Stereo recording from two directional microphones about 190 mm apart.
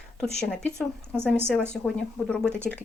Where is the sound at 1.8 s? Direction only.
Centre (ahead or behind).